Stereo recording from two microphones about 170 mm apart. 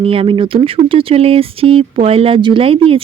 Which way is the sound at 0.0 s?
35° right (ahead or behind).